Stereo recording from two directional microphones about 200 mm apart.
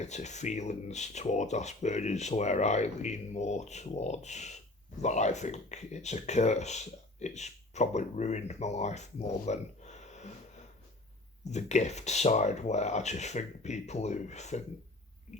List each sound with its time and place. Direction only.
0.0 s speech: 35° left (ahead or behind)
15.3 s owl: 35° left (ahead or behind)